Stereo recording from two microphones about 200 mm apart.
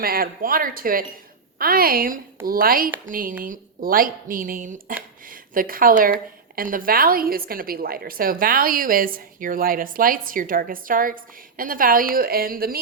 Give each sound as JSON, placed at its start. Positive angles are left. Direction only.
{"t": 0.0, "sound": "a woman's voice", "side_deg": -45}